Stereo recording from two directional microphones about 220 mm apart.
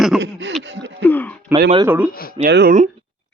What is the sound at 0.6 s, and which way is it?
Gasp, 55° right (ahead or behind).